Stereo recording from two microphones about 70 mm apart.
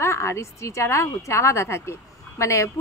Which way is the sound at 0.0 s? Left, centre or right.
Left.